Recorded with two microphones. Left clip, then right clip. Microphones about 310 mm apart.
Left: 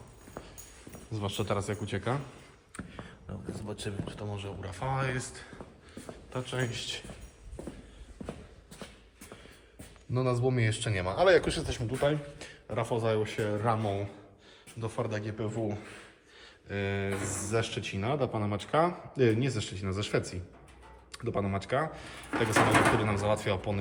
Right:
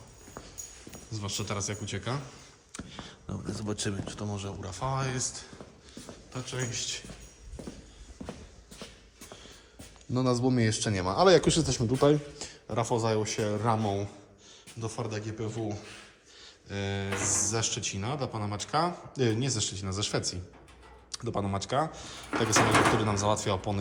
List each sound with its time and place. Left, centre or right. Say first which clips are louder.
0.4 s clip-clop: left 1 dB; centre
1.1 s speech: left 3 dB; centre
2.7 s a sound: right 2 dB; centre
3.5 s speech: right 5 dB; right; by 7.0 s centre
10.2 s speech: right 2 dB; centre
14.8 s speech: left 2 dB; centre
23.0 s speech: right 1 dB; centre